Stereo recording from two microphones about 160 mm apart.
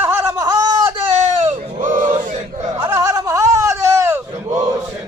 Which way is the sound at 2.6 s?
20° right (ahead or behind).